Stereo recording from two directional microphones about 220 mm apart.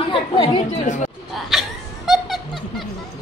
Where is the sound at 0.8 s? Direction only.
35° left (ahead or behind).